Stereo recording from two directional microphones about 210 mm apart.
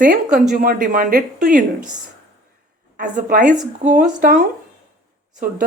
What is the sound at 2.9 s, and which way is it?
Speech, 40° right (ahead or behind).